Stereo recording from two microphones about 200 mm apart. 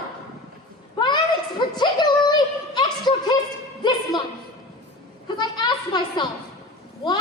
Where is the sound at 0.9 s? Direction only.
20° left (ahead or behind).